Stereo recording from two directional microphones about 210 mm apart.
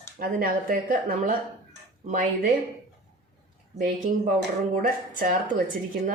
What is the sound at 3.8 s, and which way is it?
A woman's voice, 40° right (ahead or behind).